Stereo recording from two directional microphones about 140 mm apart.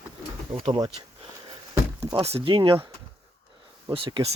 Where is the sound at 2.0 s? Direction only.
45° right (ahead or behind).